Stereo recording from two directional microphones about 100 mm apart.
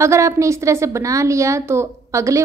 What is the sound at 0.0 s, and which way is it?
A woman's voice, 30° right (ahead or behind).